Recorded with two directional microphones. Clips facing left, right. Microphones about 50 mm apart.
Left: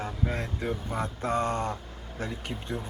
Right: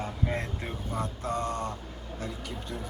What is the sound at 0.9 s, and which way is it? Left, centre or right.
Speech, left.